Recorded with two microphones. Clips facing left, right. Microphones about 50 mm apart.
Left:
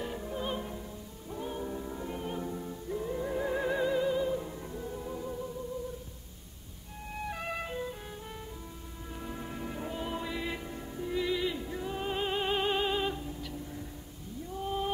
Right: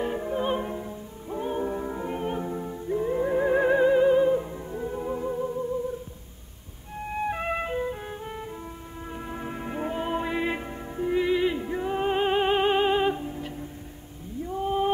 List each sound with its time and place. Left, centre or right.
0.0 s music: right
7.2 s music: right
14.4 s a sound: right